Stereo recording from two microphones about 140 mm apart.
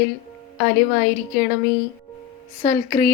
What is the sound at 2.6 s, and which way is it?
Speech, 80° left.